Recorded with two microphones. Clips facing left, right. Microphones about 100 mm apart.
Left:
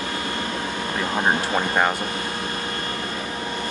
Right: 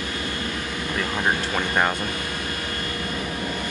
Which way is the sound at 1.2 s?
30° left (ahead or behind).